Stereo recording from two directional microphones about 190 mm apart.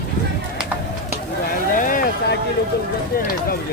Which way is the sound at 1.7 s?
45° left (ahead or behind).